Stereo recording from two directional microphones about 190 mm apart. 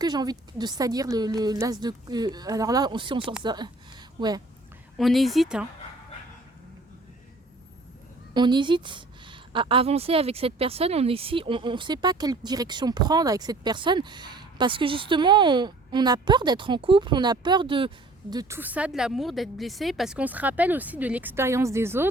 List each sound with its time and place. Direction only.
0.0 s a woman's voice: 20° right (ahead or behind)
4.9 s speech: centre (ahead or behind)
8.3 s a woman's voice: 25° right (ahead or behind)